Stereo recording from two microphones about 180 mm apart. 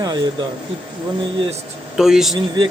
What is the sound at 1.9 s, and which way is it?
Speech, centre (ahead or behind).